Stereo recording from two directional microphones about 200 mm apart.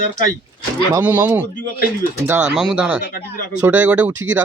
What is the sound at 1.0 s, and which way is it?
Speech, 10° right (ahead or behind).